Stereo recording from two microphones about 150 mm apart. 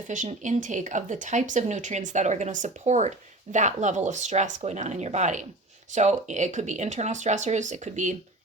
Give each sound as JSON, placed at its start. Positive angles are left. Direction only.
{"t": 0.1, "sound": "speech", "side_deg": -55}